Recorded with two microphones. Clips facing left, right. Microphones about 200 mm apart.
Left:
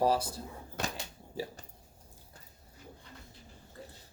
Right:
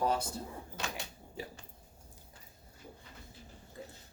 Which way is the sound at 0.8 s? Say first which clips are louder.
Left 4 dB; 55° left (ahead or behind).